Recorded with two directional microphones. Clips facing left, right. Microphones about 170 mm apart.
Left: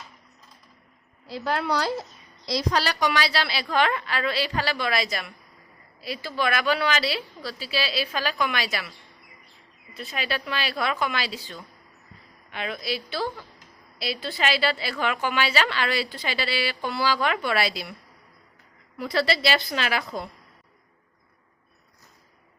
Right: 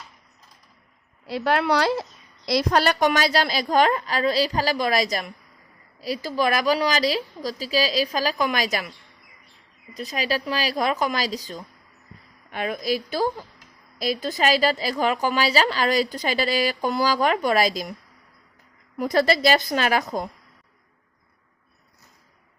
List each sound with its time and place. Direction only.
1.3 s speech: 70° right (ahead or behind)
2.5 s a woman's voice: 60° right (ahead or behind); by 8.9 s 40° right (ahead or behind)
9.9 s a woman's voice: 35° right (ahead or behind)
18.9 s a woman's voice: 45° right (ahead or behind)